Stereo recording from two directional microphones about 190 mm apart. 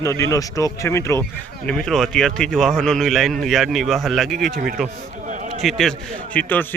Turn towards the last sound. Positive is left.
turn(degrees=10)  # may be behind; listen again after turning